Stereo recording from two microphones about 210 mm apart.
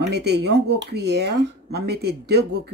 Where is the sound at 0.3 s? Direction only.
50° right (ahead or behind).